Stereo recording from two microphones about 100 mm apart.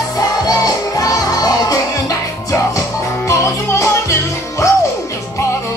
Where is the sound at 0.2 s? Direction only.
40° left (ahead or behind).